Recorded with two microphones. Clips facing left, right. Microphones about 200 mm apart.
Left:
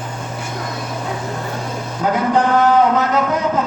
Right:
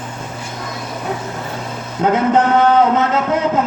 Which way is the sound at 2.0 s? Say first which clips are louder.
Right 2 dB; 25° right (ahead or behind).